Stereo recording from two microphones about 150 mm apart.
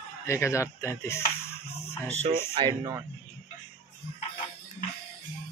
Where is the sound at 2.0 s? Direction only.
45° right (ahead or behind).